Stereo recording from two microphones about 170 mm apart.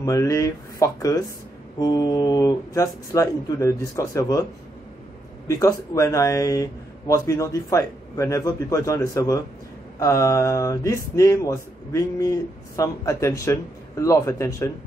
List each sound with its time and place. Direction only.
0.0 s speech: 20° left (ahead or behind)
5.5 s speech: 20° left (ahead or behind)